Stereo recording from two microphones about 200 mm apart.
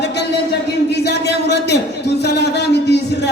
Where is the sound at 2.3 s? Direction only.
55° left (ahead or behind).